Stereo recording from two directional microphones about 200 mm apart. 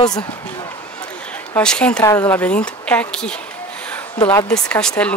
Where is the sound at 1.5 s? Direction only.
5° left (ahead or behind).